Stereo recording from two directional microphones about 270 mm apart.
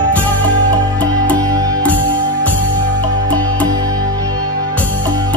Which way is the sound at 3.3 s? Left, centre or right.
Centre.